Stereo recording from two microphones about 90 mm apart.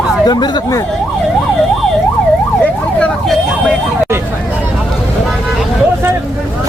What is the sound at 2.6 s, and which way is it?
Emergency vehicle, 15° left (ahead or behind).